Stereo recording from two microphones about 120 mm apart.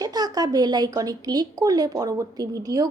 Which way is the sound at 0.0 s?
30° right (ahead or behind).